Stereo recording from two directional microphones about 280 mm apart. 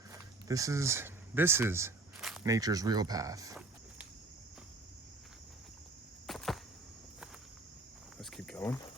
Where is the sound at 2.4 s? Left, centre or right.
Centre.